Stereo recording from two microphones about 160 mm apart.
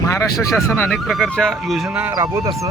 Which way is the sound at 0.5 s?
15° left (ahead or behind).